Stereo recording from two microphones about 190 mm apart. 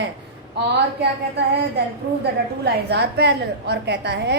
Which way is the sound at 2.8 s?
60° right (ahead or behind).